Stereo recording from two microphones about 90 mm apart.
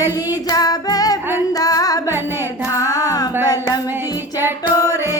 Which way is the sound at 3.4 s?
45° left (ahead or behind).